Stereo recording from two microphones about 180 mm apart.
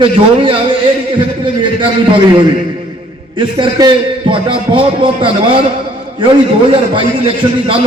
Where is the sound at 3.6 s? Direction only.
25° right (ahead or behind).